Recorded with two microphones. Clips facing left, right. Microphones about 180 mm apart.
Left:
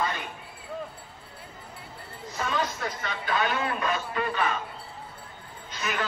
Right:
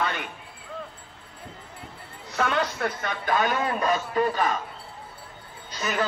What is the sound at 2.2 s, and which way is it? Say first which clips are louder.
A man's voice: right 4 dB; 70° right (ahead or behind).